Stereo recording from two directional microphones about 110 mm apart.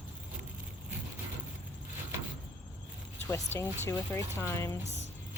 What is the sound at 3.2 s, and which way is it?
Speech, 25° left (ahead or behind).